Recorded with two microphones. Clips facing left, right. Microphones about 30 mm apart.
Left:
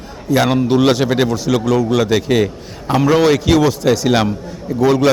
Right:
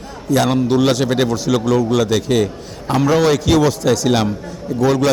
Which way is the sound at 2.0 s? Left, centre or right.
Centre.